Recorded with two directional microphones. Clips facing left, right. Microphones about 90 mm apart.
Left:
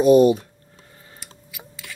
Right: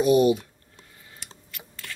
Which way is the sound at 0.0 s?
35° left (ahead or behind).